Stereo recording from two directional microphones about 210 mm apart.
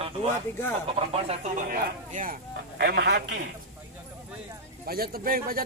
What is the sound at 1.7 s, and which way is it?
Speech, 40° right (ahead or behind).